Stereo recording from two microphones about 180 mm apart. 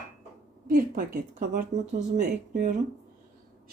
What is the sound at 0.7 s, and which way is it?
Speech, 50° right (ahead or behind).